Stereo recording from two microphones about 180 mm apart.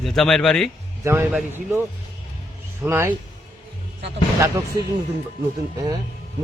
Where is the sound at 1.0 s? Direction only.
10° right (ahead or behind).